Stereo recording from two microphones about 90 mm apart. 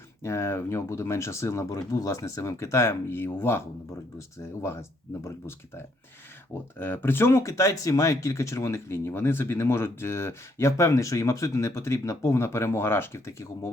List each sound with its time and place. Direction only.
0.2 s speech: 30° left (ahead or behind)
4.6 s speech: 30° left (ahead or behind)